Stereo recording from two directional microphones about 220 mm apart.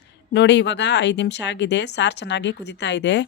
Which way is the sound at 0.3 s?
50° left (ahead or behind).